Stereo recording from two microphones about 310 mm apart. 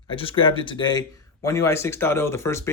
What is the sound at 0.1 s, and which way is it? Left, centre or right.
Speech, centre.